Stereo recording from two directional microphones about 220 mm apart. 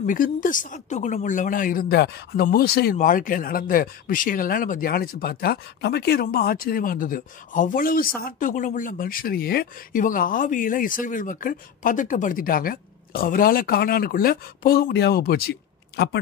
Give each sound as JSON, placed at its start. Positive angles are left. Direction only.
{"t": 0.0, "sound": "speech", "side_deg": 40}